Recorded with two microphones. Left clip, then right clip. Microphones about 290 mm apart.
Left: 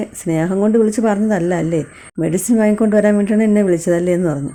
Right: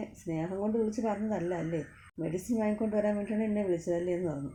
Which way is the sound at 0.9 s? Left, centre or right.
Left.